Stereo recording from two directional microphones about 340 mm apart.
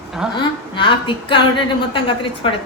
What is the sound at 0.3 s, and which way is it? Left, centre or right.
A woman's voice, centre.